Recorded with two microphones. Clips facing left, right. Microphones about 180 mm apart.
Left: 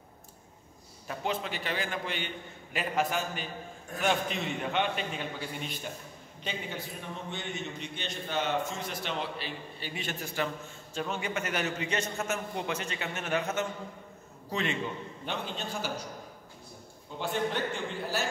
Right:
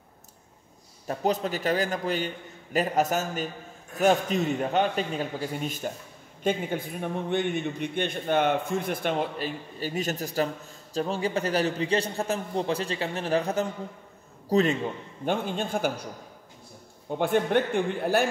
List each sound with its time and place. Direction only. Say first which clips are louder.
1.0 s a man's voice: right 7 dB; 40° right (ahead or behind)
6.4 s a man's voice: right 10 dB; 50° right (ahead or behind)
17.1 s a man's voice: right 8 dB; 55° right (ahead or behind)